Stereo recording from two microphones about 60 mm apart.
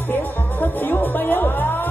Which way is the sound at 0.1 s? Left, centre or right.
Left.